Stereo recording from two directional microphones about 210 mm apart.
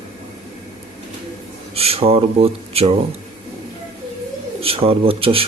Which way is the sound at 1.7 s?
30° right (ahead or behind).